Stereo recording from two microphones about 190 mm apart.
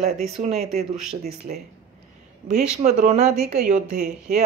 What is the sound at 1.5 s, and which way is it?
Speech, 50° right (ahead or behind).